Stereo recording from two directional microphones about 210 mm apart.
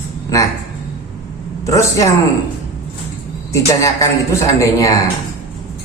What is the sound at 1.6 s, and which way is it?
Speech, 15° left (ahead or behind).